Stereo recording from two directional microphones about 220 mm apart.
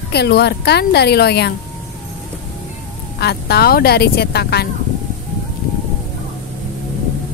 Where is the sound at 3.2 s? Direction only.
45° left (ahead or behind).